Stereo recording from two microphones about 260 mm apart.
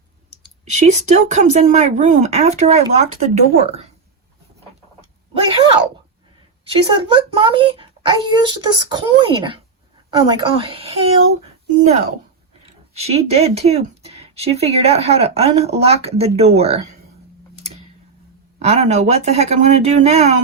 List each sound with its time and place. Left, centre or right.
0.6 s a child's voice: right
4.9 s a sound: right
6.7 s a child's voice: centre
12.6 s a child's voice: right
18.6 s a child's voice: right